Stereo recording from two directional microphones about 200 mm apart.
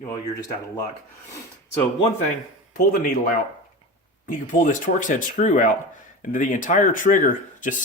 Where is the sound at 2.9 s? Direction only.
45° left (ahead or behind).